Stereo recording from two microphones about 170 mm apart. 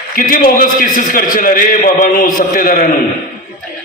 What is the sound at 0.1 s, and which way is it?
A man's voice, 55° left (ahead or behind).